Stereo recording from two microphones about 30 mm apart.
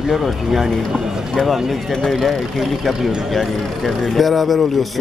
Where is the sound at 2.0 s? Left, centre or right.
Centre.